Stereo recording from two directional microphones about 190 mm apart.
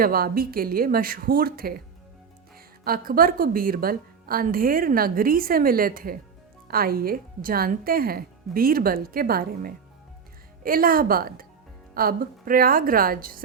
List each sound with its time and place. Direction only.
0.0 s a woman's voice: 50° right (ahead or behind)
2.8 s a woman's voice: 50° right (ahead or behind)